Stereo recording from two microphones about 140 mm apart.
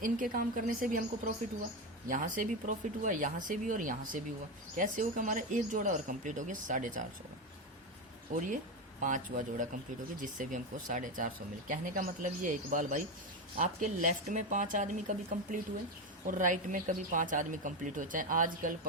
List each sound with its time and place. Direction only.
0.0 s a woman's voice: 80° right
8.3 s a woman's voice: 80° right
9.0 s speech: 65° right (ahead or behind)
16.2 s speech: 70° right (ahead or behind)